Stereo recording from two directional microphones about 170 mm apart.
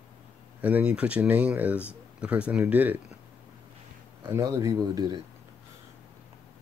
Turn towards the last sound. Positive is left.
turn(degrees=-20)  # may be behind; listen again after turning